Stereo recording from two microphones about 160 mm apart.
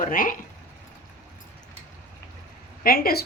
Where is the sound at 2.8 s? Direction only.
70° left (ahead or behind).